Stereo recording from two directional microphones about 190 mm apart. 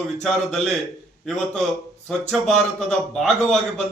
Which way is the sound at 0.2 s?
Centre (ahead or behind).